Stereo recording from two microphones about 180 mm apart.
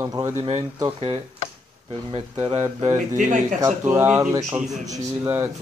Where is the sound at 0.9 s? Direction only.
35° right (ahead or behind).